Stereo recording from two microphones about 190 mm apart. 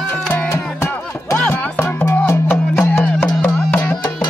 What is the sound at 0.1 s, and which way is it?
Music, 5° left (ahead or behind).